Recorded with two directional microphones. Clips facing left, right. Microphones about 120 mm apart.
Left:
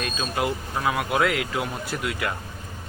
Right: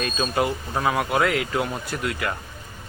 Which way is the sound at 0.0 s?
Centre (ahead or behind).